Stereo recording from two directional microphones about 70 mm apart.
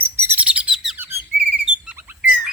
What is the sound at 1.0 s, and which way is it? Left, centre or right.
Whistle, right.